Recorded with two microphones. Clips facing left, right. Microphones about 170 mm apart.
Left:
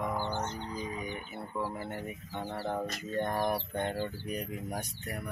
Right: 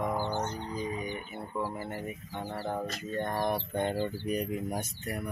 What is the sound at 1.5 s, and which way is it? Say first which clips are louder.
Speech: right 1 dB; 10° right (ahead or behind).